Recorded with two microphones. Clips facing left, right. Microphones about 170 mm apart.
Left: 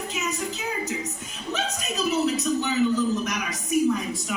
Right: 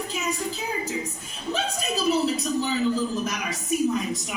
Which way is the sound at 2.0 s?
30° right (ahead or behind).